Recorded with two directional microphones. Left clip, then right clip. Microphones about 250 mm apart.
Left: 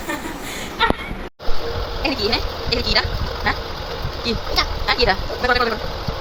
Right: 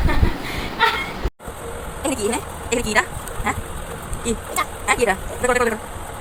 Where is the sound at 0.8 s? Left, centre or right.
Centre.